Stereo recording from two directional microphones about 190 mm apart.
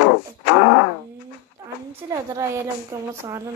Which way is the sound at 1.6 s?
15° right (ahead or behind).